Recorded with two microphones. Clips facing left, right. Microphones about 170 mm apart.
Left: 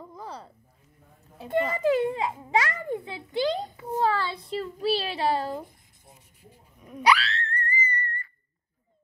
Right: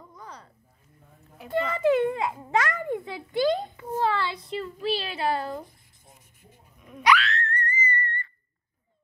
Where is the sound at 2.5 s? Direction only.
10° left (ahead or behind).